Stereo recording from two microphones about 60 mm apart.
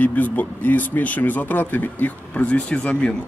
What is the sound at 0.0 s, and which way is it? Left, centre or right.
Speech, left.